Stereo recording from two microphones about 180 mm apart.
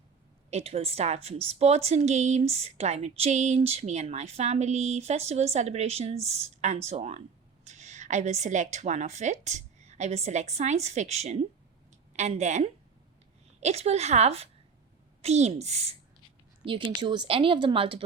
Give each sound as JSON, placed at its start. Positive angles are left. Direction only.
{"t": 0.5, "sound": "a woman's voice", "side_deg": -35}
{"t": 17.0, "sound": "a woman's voice", "side_deg": -25}